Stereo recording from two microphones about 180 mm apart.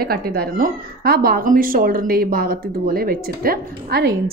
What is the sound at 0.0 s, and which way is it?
A woman's voice, 55° right (ahead or behind).